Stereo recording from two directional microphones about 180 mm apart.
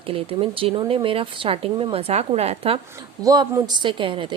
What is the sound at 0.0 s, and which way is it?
Speech, 30° right (ahead or behind).